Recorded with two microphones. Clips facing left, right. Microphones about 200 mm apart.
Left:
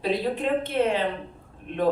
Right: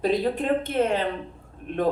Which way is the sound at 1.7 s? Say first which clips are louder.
Right 2 dB; 50° right (ahead or behind).